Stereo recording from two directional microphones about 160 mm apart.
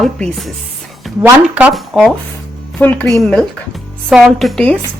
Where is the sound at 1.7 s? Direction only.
Centre (ahead or behind).